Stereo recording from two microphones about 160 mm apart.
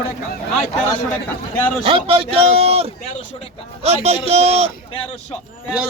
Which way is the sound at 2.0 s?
35° right (ahead or behind).